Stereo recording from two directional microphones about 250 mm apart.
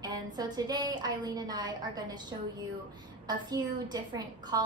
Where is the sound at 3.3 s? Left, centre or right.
Centre.